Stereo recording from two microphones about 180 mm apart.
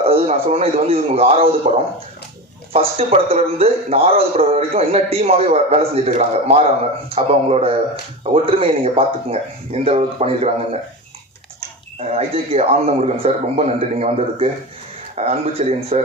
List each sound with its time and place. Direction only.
0.0 s a man's voice: 35° right (ahead or behind)
1.7 s speech: 45° right (ahead or behind)
2.7 s a man's voice: 30° right (ahead or behind)
11.9 s a man's voice: 35° right (ahead or behind)